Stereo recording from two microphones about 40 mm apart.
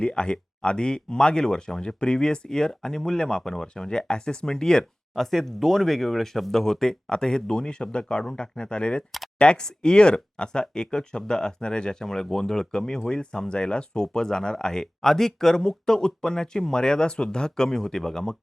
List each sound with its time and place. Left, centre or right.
0.0 s speech: left